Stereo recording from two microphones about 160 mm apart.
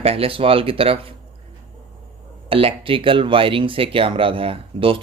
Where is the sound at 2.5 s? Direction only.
35° right (ahead or behind).